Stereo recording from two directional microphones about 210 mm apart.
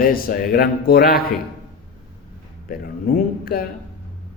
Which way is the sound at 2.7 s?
45° left (ahead or behind).